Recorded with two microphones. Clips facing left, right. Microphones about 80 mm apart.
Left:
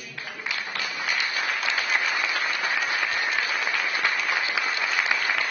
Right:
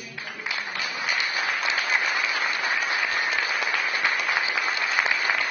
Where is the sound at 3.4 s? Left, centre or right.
Centre.